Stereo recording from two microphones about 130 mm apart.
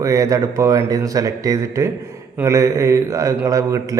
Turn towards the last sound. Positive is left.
turn(degrees=-25)  # may be behind; listen again after turning